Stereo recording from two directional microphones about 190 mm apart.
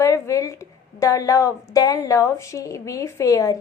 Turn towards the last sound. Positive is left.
turn(degrees=15)  # may be behind; listen again after turning